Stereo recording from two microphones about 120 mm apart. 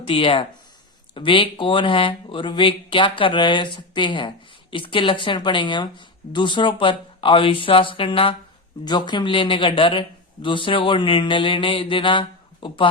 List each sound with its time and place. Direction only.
0.0 s a man's voice: 50° left (ahead or behind)